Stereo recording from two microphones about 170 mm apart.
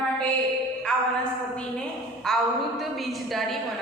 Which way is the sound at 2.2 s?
Centre (ahead or behind).